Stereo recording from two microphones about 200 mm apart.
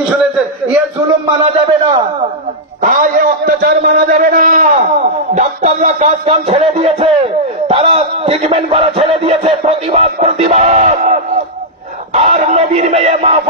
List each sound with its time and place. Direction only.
2.8 s a man's voice: 45° right (ahead or behind)
5.3 s music: 35° right (ahead or behind)
7.6 s a sound: 25° right (ahead or behind)